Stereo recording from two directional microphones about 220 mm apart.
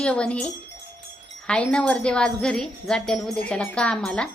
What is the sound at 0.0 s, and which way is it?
Speech, 5° left (ahead or behind).